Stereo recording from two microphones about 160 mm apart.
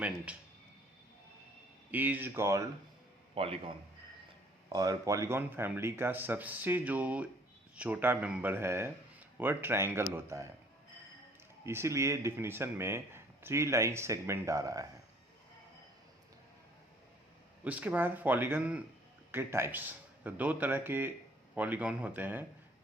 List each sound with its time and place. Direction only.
0.3 s speech: 10° right (ahead or behind)
1.9 s speech: 10° right (ahead or behind)
3.3 s a man's voice: 35° right (ahead or behind)
4.7 s speech: 20° right (ahead or behind)
11.6 s speech: 15° right (ahead or behind)
17.6 s speech: 10° right (ahead or behind)